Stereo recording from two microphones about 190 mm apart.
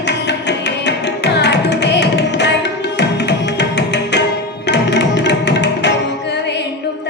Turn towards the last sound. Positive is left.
turn(degrees=65)  # may be behind; listen again after turning